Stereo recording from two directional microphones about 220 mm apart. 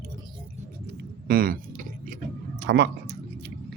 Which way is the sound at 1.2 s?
40° right (ahead or behind).